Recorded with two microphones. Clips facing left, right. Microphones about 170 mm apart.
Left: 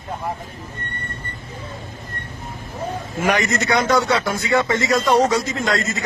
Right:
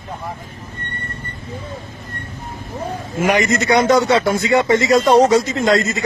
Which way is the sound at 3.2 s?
15° right (ahead or behind).